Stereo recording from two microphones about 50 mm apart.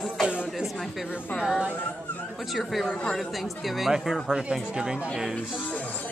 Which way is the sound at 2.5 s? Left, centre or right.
Centre.